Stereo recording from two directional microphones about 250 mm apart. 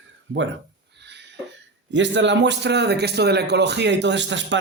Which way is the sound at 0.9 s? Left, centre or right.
Right.